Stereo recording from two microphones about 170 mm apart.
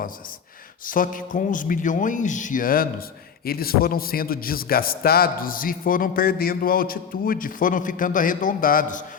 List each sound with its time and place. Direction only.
0.9 s a man's voice: 55° left (ahead or behind)